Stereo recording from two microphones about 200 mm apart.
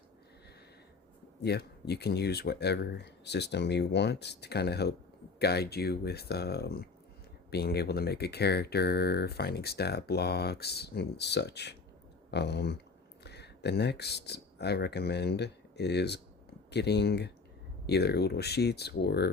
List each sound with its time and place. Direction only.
1.4 s speech: 55° left (ahead or behind)